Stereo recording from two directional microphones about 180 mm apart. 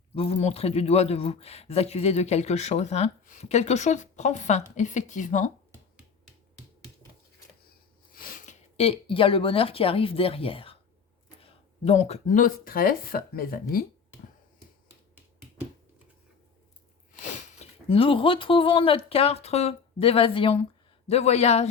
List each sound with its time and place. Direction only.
0.1 s speech: 35° left (ahead or behind)
8.1 s speech: 50° left (ahead or behind)
17.1 s speech: 40° left (ahead or behind)